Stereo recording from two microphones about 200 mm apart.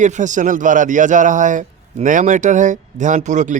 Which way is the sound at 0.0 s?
40° right (ahead or behind).